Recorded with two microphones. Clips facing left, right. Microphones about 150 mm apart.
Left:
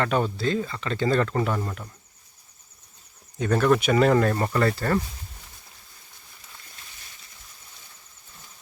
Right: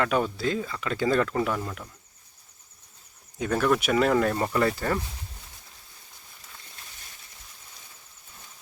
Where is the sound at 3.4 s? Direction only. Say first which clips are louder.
Left 3 dB; 5° right (ahead or behind).